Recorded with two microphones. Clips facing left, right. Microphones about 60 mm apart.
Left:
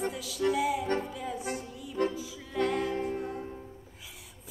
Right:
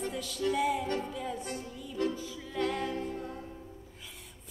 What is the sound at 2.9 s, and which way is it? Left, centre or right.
Music, left.